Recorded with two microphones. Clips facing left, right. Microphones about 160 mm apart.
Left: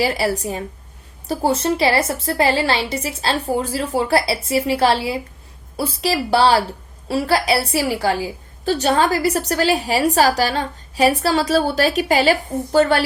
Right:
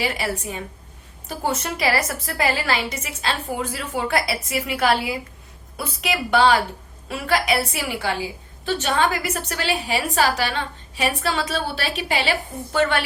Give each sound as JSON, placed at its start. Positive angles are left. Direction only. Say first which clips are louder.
{"t": 0.0, "sound": "a woman's voice", "louder": "left 6 dB", "side_deg": 35}